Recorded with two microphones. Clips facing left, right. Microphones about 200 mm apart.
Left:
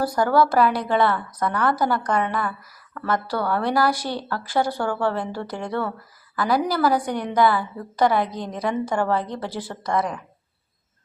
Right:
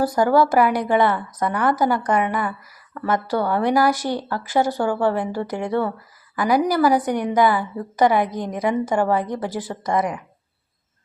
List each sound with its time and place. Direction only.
0.1 s a woman's voice: 15° right (ahead or behind)